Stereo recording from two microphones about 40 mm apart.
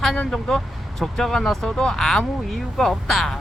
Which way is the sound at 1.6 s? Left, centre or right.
Centre.